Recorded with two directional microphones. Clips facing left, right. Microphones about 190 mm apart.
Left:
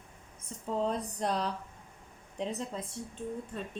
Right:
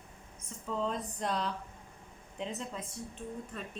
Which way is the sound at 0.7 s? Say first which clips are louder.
Left 3 dB; 40° left (ahead or behind).